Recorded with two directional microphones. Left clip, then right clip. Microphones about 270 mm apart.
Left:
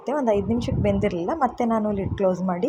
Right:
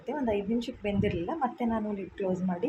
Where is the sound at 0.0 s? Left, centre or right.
Centre.